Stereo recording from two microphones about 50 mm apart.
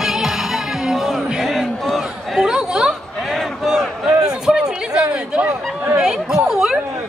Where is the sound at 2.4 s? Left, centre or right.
Centre.